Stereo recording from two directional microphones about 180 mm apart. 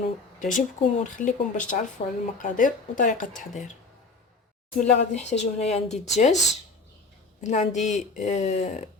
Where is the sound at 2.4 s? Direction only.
45° left (ahead or behind).